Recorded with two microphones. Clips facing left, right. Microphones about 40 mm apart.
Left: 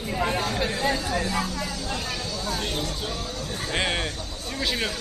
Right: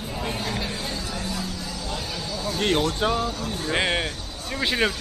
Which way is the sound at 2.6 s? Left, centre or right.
Right.